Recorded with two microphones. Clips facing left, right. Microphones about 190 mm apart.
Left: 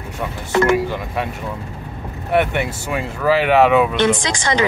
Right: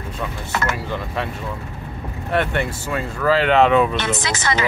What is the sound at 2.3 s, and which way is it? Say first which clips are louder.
Speech: left 3 dB; 10° left (ahead or behind).